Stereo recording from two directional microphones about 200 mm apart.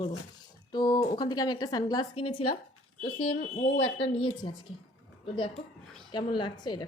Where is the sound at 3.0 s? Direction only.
35° left (ahead or behind).